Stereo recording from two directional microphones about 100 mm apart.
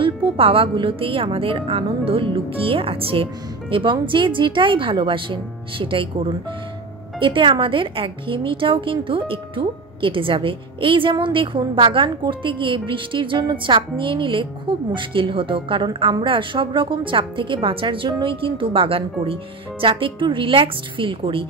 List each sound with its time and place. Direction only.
0.0 s a woman's voice: 60° right (ahead or behind)